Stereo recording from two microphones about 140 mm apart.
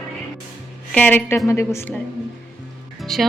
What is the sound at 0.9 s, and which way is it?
A woman's voice, 15° left (ahead or behind).